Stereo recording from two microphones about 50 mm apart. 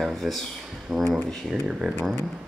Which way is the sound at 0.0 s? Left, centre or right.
Centre.